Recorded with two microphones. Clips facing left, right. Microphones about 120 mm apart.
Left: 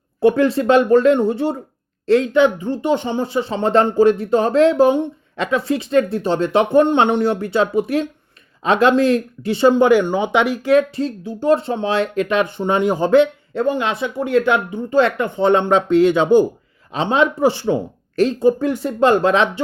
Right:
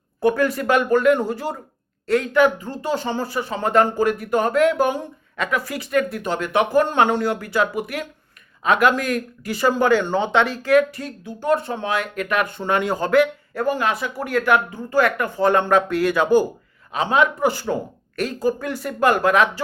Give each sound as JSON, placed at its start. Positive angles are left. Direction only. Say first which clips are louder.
{"t": 0.2, "sound": "speech", "louder": "left 5 dB", "side_deg": 25}